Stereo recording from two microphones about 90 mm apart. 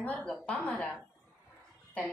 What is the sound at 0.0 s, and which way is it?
Speech, 15° left (ahead or behind).